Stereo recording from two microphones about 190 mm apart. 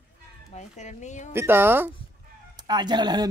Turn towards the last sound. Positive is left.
turn(degrees=-20)  # may be behind; listen again after turning